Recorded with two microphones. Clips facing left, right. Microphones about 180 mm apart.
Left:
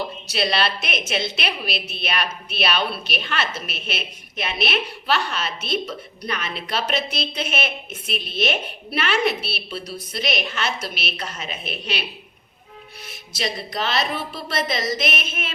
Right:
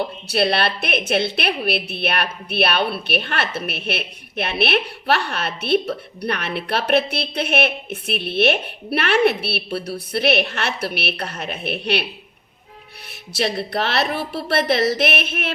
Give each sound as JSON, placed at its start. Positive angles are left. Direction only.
{"t": 0.0, "sound": "a woman's voice", "side_deg": -60}
{"t": 13.3, "sound": "speech", "side_deg": -65}